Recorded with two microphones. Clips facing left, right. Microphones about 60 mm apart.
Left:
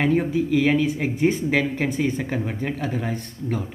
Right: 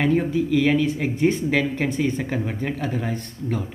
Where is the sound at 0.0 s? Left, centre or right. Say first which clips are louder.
Even; centre.